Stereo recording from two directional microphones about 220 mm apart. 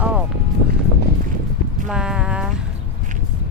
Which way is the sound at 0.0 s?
5° right (ahead or behind).